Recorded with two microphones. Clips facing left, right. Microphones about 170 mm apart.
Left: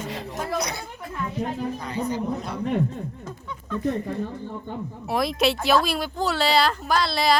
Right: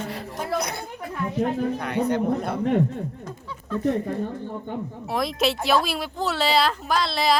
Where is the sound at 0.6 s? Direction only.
55° right (ahead or behind).